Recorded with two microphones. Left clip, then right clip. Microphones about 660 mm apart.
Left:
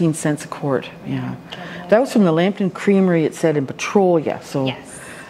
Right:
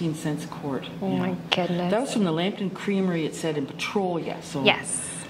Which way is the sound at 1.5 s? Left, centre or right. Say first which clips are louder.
Right 13 dB; right.